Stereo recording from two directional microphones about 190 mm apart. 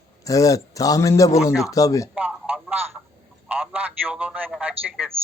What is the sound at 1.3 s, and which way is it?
Speech, centre (ahead or behind).